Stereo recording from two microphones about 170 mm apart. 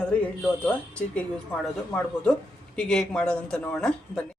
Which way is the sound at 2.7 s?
5° left (ahead or behind).